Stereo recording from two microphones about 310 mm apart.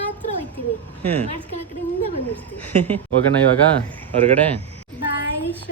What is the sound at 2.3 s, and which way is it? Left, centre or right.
Speech, centre.